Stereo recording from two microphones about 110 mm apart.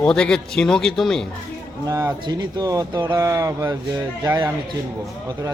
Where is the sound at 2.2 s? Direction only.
40° right (ahead or behind).